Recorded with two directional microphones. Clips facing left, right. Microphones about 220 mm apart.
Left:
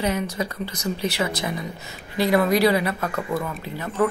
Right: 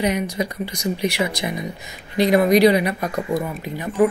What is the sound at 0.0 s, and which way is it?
Speech, 15° right (ahead or behind).